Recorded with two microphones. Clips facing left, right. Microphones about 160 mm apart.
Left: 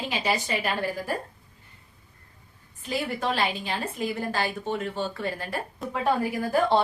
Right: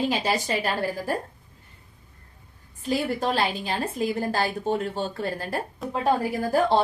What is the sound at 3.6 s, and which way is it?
A woman's voice, 35° right (ahead or behind).